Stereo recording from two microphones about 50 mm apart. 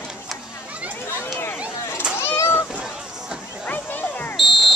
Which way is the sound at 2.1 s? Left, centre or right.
Left.